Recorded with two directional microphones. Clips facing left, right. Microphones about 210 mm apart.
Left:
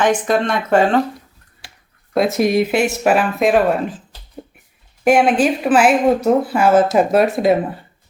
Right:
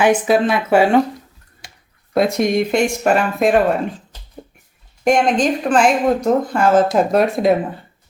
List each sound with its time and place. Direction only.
0.0 s speech: 5° right (ahead or behind)
2.1 s speech: centre (ahead or behind)
5.0 s speech: 5° left (ahead or behind)